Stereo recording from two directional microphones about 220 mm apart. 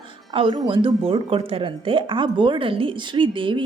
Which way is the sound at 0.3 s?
20° right (ahead or behind).